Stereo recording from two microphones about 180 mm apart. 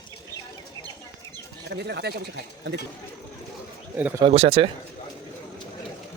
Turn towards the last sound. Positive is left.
turn(degrees=-30)  # may be behind; listen again after turning